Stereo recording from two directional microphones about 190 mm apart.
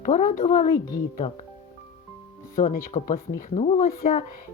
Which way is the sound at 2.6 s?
40° left (ahead or behind).